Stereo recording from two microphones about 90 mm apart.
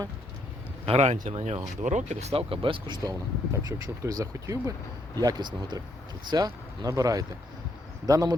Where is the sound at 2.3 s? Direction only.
90° right.